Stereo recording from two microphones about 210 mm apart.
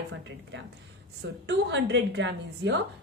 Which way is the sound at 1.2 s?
55° right (ahead or behind).